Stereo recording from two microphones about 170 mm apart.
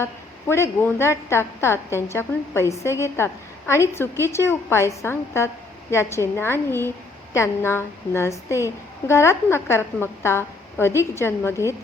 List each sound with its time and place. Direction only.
0.0 s a woman's voice: 15° left (ahead or behind)